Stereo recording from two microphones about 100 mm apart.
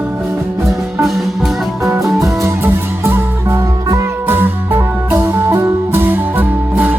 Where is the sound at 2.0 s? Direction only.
30° right (ahead or behind).